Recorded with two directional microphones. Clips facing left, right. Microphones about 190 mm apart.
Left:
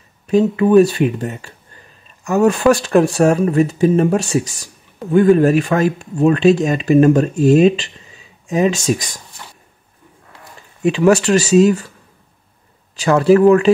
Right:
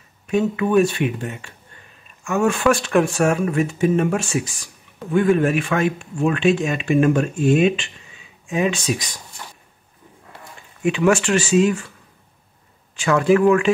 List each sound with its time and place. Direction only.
0.3 s speech: 35° left (ahead or behind)
10.8 s speech: 35° left (ahead or behind)
12.9 s speech: 35° left (ahead or behind)